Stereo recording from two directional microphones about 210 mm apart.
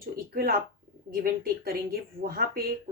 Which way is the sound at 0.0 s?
45° right (ahead or behind).